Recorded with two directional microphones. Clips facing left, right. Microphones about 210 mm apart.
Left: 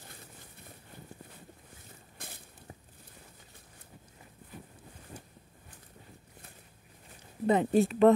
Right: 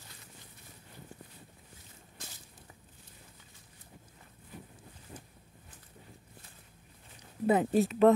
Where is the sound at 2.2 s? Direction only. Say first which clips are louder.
Left 3 dB; 55° left (ahead or behind).